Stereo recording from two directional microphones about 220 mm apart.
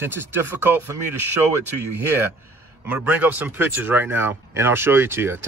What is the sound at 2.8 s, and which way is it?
Speech, 10° right (ahead or behind).